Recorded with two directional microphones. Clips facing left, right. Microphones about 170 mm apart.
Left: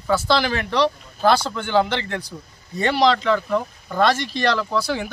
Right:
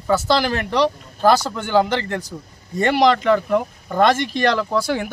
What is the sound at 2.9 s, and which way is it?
Speech, 15° right (ahead or behind).